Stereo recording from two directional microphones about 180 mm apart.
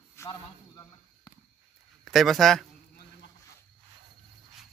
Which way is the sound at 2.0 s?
Centre (ahead or behind).